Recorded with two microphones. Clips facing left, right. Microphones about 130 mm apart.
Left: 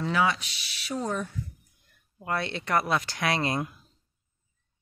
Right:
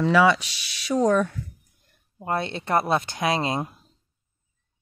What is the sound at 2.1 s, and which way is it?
Speech, 25° right (ahead or behind).